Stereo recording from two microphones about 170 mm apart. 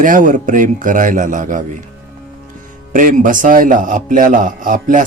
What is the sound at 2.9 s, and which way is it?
A man's voice, 50° right (ahead or behind).